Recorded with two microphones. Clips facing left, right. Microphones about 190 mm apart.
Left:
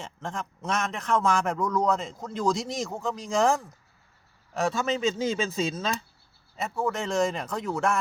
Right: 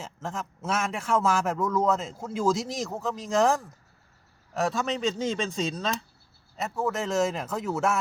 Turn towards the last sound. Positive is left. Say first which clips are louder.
# even
turn(degrees=-5)  # may be behind; listen again after turning